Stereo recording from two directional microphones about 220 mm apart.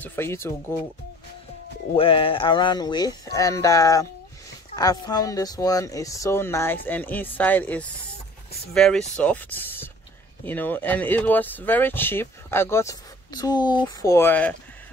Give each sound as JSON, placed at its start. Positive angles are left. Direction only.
{"t": 0.0, "sound": "speech", "side_deg": 10}
{"t": 2.0, "sound": "speech", "side_deg": 25}